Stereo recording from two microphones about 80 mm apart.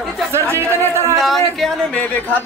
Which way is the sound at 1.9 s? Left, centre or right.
Centre.